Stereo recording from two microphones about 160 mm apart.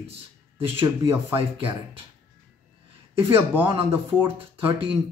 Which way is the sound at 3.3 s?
15° right (ahead or behind).